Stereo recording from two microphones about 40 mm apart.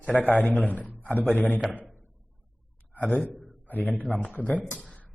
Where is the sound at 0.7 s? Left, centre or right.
Left.